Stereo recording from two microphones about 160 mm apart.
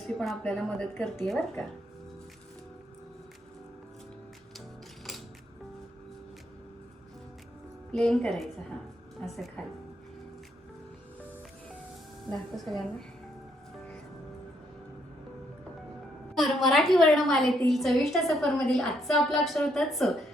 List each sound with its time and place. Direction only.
0.0 s a woman's voice: centre (ahead or behind)
7.9 s a woman's voice: 5° left (ahead or behind)
16.3 s a woman's voice: centre (ahead or behind)